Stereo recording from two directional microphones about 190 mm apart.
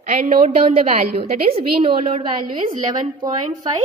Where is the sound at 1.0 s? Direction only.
30° right (ahead or behind).